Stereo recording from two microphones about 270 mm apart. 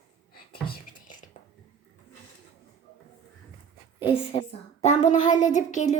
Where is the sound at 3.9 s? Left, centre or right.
Centre.